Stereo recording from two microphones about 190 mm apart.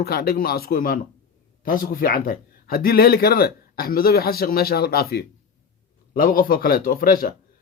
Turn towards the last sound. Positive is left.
turn(degrees=50)  # may be behind; listen again after turning